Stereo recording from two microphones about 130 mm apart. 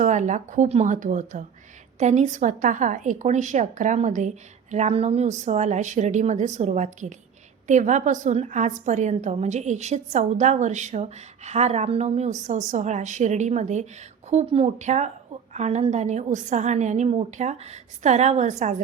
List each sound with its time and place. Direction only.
0.0 s speech: 70° right (ahead or behind)
0.9 s speech: 85° right
2.0 s a woman's voice: 65° right (ahead or behind); by 14.7 s 50° right (ahead or behind)
14.8 s a woman's voice: 65° right (ahead or behind)